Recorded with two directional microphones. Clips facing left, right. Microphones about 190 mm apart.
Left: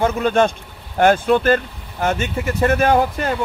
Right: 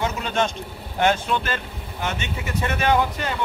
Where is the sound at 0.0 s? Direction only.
50° left (ahead or behind).